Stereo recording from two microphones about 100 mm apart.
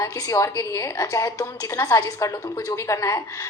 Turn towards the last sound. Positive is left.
turn(degrees=30)  # may be behind; listen again after turning